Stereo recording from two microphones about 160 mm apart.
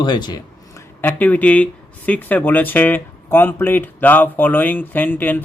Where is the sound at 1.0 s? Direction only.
10° left (ahead or behind).